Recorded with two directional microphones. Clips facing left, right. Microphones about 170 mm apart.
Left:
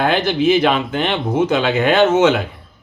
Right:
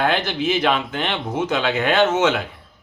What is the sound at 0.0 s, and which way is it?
Speech, 15° left (ahead or behind).